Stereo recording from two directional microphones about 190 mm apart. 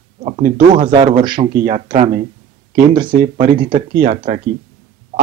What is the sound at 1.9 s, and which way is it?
Speech, 40° right (ahead or behind).